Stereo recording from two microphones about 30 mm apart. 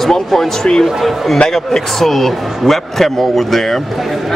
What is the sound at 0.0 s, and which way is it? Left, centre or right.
Speech, centre.